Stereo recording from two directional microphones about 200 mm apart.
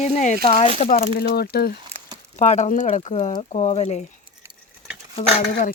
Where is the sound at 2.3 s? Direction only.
35° left (ahead or behind).